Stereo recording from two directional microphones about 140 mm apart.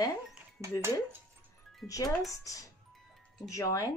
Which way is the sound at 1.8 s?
25° left (ahead or behind).